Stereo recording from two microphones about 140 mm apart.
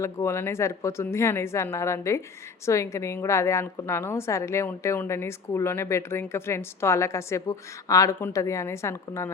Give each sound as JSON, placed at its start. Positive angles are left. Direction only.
{"t": 0.0, "sound": "a woman's voice", "side_deg": 20}